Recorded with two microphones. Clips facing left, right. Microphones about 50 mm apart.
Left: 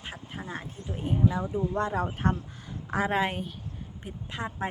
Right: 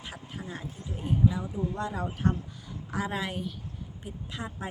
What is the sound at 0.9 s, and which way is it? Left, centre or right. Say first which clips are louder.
A woman's voice: left 1 dB; left.